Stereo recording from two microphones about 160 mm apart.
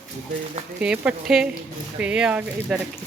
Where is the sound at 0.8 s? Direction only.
5° right (ahead or behind).